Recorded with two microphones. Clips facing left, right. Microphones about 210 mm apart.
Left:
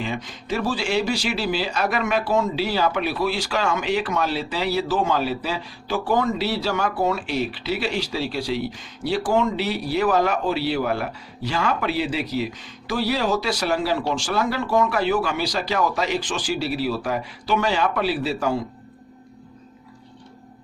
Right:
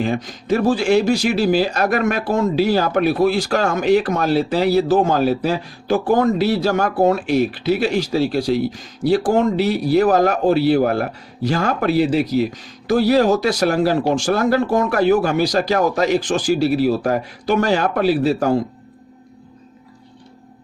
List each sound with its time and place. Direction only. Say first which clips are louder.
0.0 s speech: right 7 dB; 45° right (ahead or behind)